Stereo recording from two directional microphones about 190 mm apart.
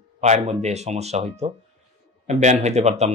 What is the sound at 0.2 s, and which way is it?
Speech, 35° right (ahead or behind).